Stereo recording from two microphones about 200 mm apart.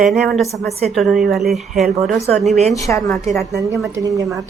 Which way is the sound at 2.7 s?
15° left (ahead or behind).